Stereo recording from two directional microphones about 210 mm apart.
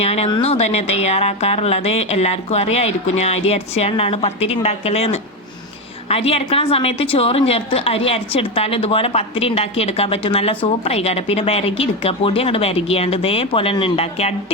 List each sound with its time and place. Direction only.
0.0 s a woman's voice: 30° left (ahead or behind)